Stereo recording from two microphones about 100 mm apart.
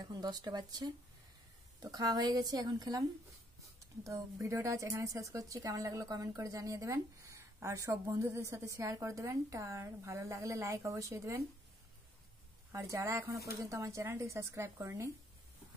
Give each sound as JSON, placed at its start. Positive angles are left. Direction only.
{"t": 0.0, "sound": "speech", "side_deg": -40}
{"t": 12.7, "sound": "speech", "side_deg": -30}